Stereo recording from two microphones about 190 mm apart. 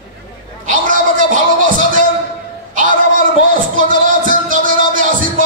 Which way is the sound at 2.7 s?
45° right (ahead or behind).